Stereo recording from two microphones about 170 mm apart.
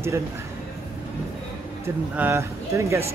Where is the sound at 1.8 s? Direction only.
15° right (ahead or behind).